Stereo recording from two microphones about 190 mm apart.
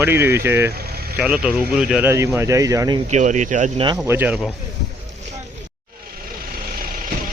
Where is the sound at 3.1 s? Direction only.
40° right (ahead or behind).